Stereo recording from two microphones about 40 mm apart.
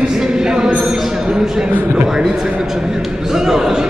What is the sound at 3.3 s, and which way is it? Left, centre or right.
Speech, centre.